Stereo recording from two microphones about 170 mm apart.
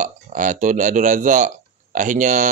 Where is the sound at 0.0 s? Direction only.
50° right (ahead or behind).